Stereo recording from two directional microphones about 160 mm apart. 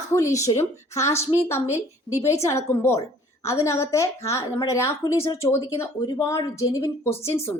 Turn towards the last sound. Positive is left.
turn(degrees=15)  # may be behind; listen again after turning